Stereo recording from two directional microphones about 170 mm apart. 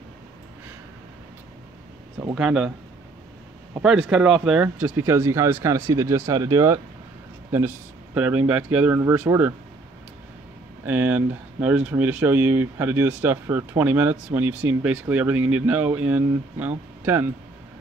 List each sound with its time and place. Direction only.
2.3 s speech: 5° right (ahead or behind)
3.8 s speech: 5° right (ahead or behind)
10.9 s speech: 10° right (ahead or behind)